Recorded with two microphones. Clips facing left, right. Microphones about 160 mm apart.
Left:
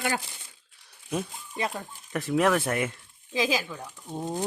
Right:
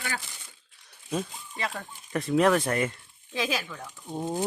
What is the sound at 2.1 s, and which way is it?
Speech, centre (ahead or behind).